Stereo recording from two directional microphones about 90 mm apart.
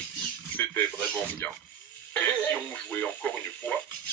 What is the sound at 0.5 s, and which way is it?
Speech, 20° left (ahead or behind).